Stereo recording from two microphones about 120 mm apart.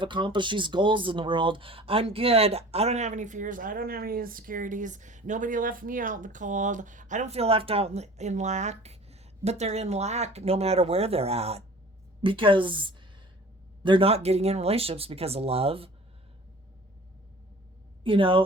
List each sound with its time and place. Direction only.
0.0 s speech: 40° right (ahead or behind); by 3.6 s 90° right
4.6 s speech: 90° right; by 11.6 s 60° right (ahead or behind)
12.2 s speech: 45° right (ahead or behind)
14.1 s speech: 60° right (ahead or behind)
18.0 s speech: 45° right (ahead or behind)